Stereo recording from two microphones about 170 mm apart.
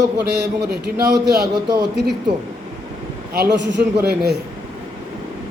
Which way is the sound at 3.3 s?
75° right (ahead or behind).